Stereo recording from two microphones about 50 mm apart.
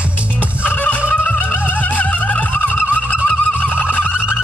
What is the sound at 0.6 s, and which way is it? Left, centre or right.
Fowl, left.